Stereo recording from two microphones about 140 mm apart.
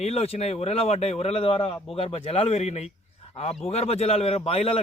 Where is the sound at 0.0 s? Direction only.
50° left (ahead or behind).